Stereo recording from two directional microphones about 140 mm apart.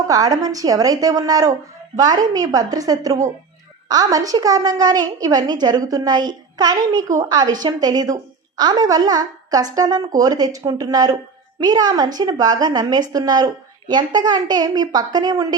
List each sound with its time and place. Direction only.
0.1 s a woman's voice: 25° right (ahead or behind)